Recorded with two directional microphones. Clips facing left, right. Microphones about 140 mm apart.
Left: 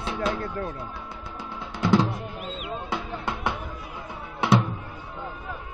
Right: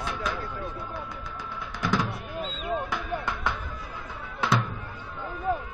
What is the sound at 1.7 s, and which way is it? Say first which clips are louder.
Music: left 6 dB; 25° left (ahead or behind).